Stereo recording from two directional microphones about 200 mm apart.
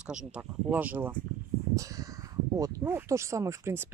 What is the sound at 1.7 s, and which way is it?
Crow, 15° right (ahead or behind).